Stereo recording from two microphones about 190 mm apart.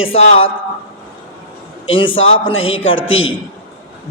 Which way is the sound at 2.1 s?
90° left.